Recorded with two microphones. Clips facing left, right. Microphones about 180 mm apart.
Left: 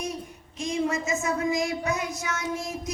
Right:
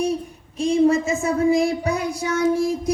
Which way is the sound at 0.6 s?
30° right (ahead or behind).